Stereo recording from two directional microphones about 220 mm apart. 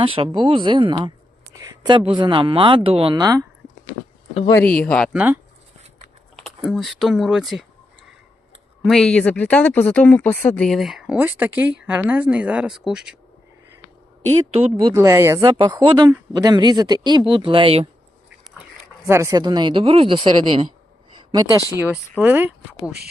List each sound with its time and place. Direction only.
0.0 s speech: 25° right (ahead or behind)
4.5 s speech: 5° left (ahead or behind)
8.8 s speech: centre (ahead or behind)
14.6 s speech: 10° right (ahead or behind)
19.0 s speech: 10° right (ahead or behind)
22.2 s speech: 10° right (ahead or behind)